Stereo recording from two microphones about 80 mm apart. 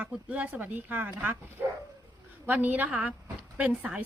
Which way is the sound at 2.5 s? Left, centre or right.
Right.